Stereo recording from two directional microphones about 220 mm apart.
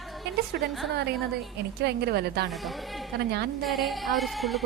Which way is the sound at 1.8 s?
45° right (ahead or behind).